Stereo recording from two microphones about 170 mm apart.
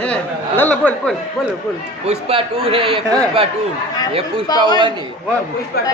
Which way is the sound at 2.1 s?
35° right (ahead or behind).